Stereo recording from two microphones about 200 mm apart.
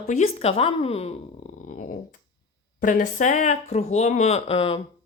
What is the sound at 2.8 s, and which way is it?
Speech, 40° left (ahead or behind).